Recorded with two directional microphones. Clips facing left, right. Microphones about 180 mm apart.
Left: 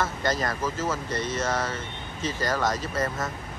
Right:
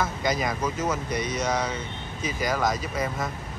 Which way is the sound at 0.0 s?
10° right (ahead or behind).